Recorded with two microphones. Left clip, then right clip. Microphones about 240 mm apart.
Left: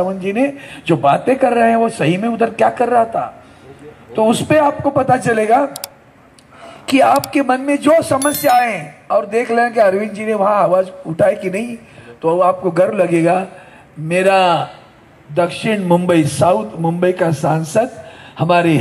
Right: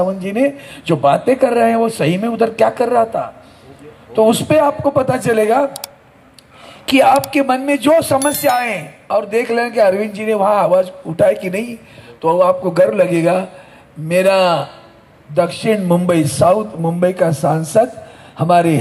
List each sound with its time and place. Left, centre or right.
0.0 s a man's voice: right
6.6 s a sound: right
7.3 s a man's voice: right